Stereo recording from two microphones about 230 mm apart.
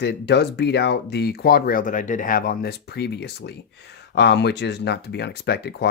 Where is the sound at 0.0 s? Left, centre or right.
Left.